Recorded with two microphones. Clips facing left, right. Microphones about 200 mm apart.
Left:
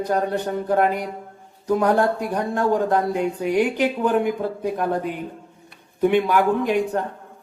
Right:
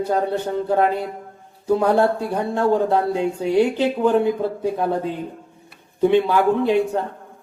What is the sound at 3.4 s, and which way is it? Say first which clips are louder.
Speech: right 3 dB; 15° left (ahead or behind).